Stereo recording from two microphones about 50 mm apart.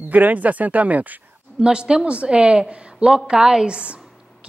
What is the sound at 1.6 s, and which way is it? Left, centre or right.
A woman's voice, centre.